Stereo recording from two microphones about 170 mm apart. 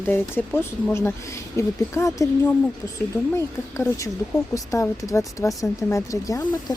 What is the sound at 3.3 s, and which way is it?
Speech, 15° left (ahead or behind).